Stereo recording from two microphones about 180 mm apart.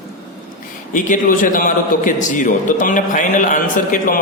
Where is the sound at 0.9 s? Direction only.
45° left (ahead or behind).